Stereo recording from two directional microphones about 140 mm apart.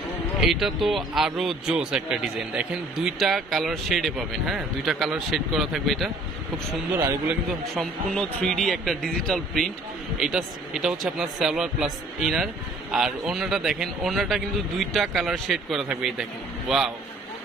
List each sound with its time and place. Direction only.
0.5 s speech: centre (ahead or behind)
7.0 s a man's voice: 20° right (ahead or behind)
8.1 s speech: 5° left (ahead or behind)